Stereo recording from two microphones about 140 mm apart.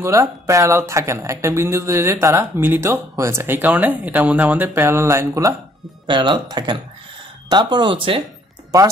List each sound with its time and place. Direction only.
0.0 s speech: 20° right (ahead or behind)
6.0 s speech: 35° right (ahead or behind)
8.7 s speech: 25° right (ahead or behind)